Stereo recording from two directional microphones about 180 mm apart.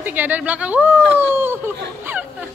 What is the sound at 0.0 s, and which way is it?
Speech, 10° right (ahead or behind).